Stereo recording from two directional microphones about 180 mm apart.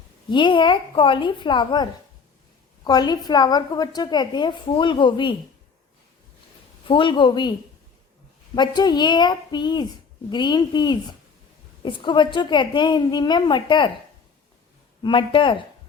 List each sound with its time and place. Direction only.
0.3 s a woman's voice: 25° left (ahead or behind)
6.8 s a woman's voice: 25° left (ahead or behind)
8.5 s a woman's voice: 25° left (ahead or behind)
15.0 s a woman's voice: 25° left (ahead or behind)